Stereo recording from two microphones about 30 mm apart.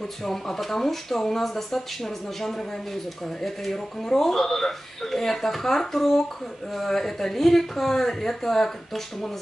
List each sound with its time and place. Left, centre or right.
0.2 s speech: centre
3.4 s speech: centre